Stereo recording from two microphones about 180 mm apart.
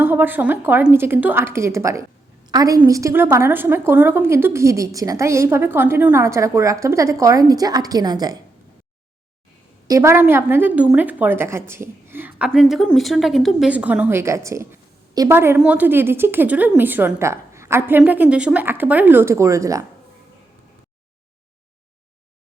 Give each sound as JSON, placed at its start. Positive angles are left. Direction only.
{"t": 0.0, "sound": "a woman's voice", "side_deg": -10}
{"t": 9.8, "sound": "a woman's voice", "side_deg": -15}
{"t": 12.5, "sound": "a woman's voice", "side_deg": 0}